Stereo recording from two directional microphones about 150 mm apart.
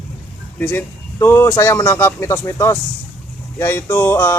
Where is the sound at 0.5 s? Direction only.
10° left (ahead or behind).